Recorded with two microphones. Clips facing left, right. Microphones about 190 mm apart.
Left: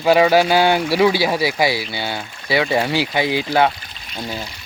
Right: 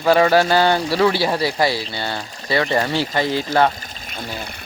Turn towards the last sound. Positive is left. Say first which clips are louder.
# left 1 dB
turn(degrees=-55)  # may be behind; listen again after turning